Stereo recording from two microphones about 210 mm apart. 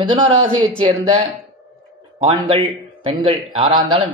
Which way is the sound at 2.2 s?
25° right (ahead or behind).